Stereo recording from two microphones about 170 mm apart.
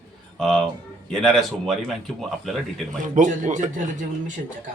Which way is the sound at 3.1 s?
45° right (ahead or behind).